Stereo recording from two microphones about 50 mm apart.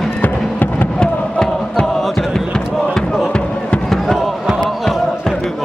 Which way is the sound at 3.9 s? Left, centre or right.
Centre.